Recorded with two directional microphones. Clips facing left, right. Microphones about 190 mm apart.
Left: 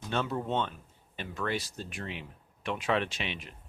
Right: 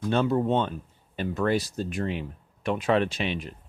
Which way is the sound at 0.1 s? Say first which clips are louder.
Right 8 dB; 35° right (ahead or behind).